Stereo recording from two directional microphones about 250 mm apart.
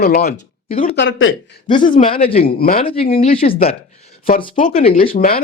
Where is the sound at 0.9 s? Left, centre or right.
Left.